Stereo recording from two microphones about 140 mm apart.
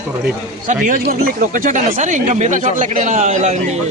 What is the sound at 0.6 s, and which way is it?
Speech, 70° right (ahead or behind).